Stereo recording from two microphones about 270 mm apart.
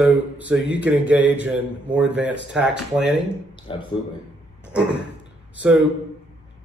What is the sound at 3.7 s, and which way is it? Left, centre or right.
Speech, centre.